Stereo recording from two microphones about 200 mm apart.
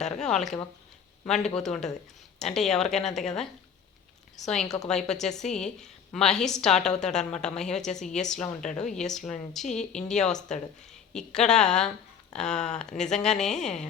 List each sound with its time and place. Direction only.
0.0 s a man's voice: 5° left (ahead or behind)
4.9 s a woman's voice: 5° left (ahead or behind)